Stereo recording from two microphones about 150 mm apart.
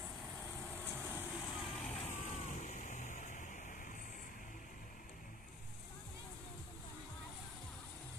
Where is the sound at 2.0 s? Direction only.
45° left (ahead or behind).